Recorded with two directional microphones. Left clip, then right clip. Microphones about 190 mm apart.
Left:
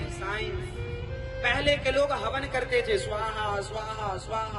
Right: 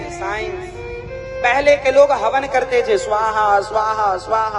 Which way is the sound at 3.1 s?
35° right (ahead or behind).